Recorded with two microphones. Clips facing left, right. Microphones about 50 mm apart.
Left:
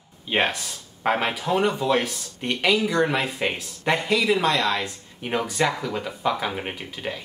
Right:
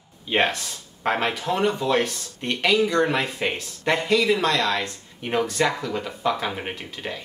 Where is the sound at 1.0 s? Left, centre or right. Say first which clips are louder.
Even; centre.